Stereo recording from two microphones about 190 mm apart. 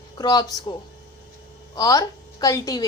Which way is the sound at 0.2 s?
20° left (ahead or behind).